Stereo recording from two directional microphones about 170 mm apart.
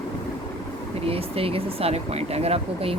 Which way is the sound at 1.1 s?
35° right (ahead or behind).